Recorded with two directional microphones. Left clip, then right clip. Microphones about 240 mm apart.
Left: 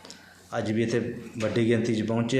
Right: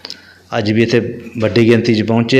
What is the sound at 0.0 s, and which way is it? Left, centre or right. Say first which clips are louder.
A man's voice: right 15 dB; right.